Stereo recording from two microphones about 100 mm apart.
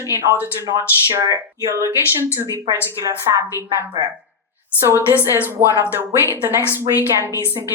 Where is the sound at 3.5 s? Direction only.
25° right (ahead or behind).